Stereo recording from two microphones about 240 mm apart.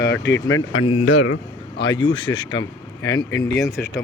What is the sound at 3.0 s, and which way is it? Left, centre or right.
Speech, centre.